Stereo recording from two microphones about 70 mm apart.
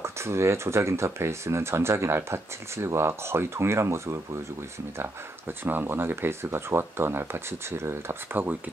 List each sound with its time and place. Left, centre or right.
0.0 s speech: right
5.5 s speech: right